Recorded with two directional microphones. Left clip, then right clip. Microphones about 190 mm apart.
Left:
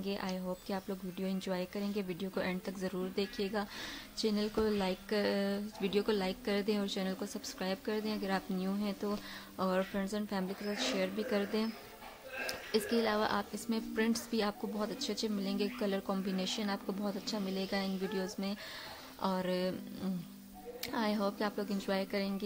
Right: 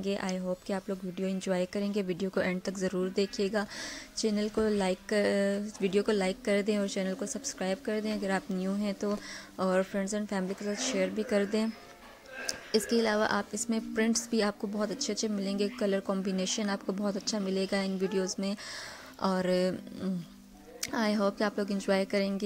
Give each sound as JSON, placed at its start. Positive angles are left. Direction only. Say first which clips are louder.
{"t": 0.0, "sound": "a woman's voice", "louder": "right 5 dB", "side_deg": -20}